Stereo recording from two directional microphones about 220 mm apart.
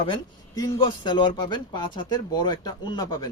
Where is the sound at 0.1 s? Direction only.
20° left (ahead or behind).